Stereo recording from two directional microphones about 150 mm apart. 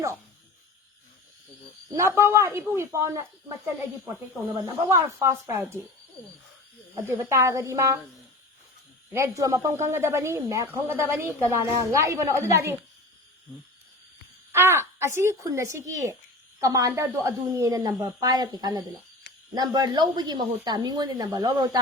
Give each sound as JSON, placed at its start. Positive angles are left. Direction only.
{"t": 2.0, "sound": "speech", "side_deg": -20}
{"t": 4.5, "sound": "speech", "side_deg": -20}
{"t": 7.1, "sound": "speech", "side_deg": -20}
{"t": 9.1, "sound": "speech", "side_deg": -20}
{"t": 14.5, "sound": "speech", "side_deg": -15}